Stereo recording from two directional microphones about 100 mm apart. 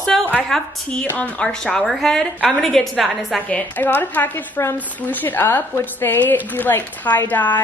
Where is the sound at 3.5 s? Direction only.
15° left (ahead or behind).